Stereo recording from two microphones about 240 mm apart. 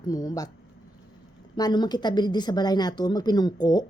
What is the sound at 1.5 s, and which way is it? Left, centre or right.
Speech, centre.